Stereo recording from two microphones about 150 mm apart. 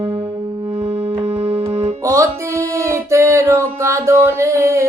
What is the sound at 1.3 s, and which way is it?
Keyboard, 40° right (ahead or behind).